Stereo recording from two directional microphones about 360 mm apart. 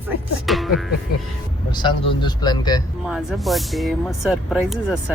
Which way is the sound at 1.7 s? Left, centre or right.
Centre.